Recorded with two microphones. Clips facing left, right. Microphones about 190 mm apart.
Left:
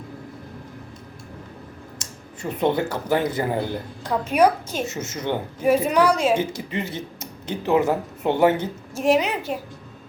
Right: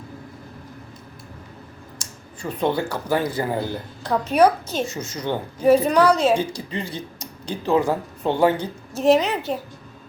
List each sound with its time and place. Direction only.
2.0 s speech: 20° left (ahead or behind)
4.4 s a woman's voice: 10° left (ahead or behind)
4.9 s a woman's voice: 25° left (ahead or behind)
6.3 s speech: 20° left (ahead or behind)
9.0 s a woman's voice: 10° left (ahead or behind)